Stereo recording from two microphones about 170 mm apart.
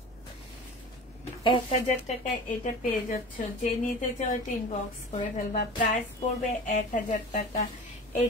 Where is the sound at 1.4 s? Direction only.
30° left (ahead or behind).